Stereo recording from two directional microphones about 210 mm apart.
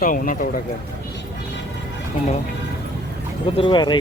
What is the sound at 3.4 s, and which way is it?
Speech, 25° left (ahead or behind).